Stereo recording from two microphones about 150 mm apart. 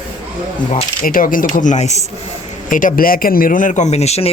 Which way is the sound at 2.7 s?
60° left (ahead or behind).